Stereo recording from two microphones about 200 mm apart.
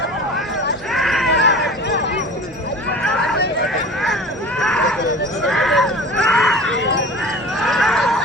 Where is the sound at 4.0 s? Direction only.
Centre (ahead or behind).